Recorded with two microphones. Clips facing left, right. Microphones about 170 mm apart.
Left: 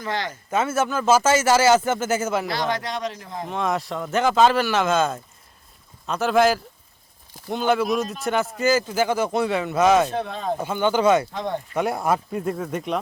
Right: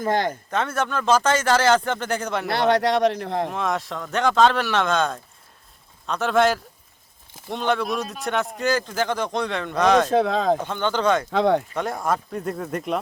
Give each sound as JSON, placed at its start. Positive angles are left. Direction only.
{"t": 0.0, "sound": "speech", "side_deg": -50}
{"t": 0.5, "sound": "speech", "side_deg": 5}
{"t": 2.5, "sound": "a man's voice", "side_deg": -65}
{"t": 3.5, "sound": "speech", "side_deg": 0}
{"t": 10.1, "sound": "speech", "side_deg": -90}
{"t": 10.6, "sound": "speech", "side_deg": 10}
{"t": 11.3, "sound": "speech", "side_deg": -85}
{"t": 11.7, "sound": "speech", "side_deg": 10}